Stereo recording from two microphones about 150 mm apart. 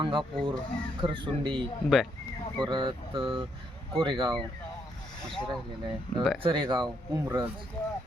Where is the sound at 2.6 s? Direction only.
30° right (ahead or behind).